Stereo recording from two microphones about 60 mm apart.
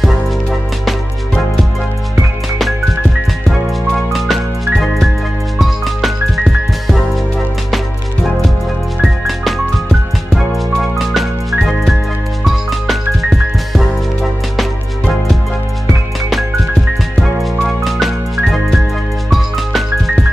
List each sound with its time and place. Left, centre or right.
0.8 s music: centre
4.1 s music: centre
9.0 s music: centre
17.2 s music: centre